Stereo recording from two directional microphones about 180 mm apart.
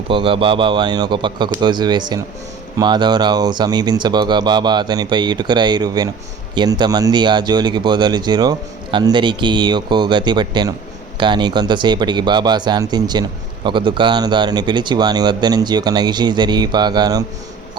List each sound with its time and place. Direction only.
0.1 s speech: 30° right (ahead or behind)